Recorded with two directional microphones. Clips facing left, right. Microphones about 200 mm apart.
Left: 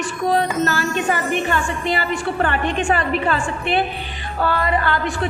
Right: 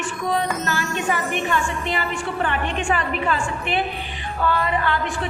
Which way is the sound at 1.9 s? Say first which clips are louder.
Left 4 dB; 40° left (ahead or behind).